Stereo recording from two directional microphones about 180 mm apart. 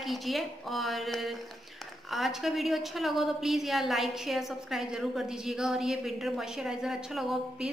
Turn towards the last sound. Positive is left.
turn(degrees=0)  # may be behind; listen again after turning